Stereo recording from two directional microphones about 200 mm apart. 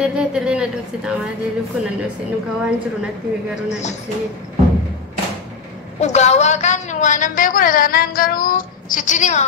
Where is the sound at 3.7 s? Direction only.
35° left (ahead or behind).